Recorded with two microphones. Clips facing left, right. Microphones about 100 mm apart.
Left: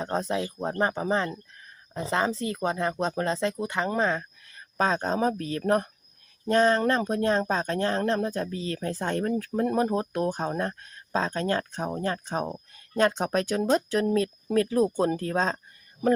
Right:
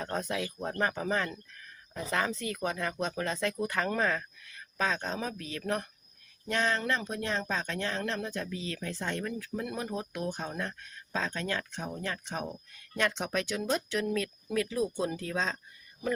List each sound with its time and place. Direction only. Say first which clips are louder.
0.0 s speech: left 5 dB; 30° left (ahead or behind)
4.4 s speech: left 6 dB; 35° left (ahead or behind)